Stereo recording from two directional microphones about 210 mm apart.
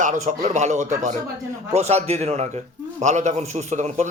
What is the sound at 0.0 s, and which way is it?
A man's voice, 35° right (ahead or behind).